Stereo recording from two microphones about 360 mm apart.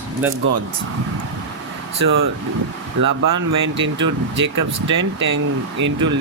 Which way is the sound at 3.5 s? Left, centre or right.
Right.